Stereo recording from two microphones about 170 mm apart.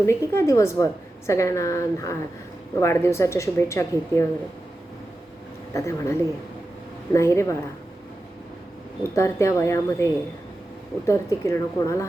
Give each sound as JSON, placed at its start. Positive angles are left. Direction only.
{"t": 0.0, "sound": "a woman's voice", "side_deg": 15}
{"t": 5.7, "sound": "a woman's voice", "side_deg": 15}
{"t": 9.1, "sound": "a woman's voice", "side_deg": 15}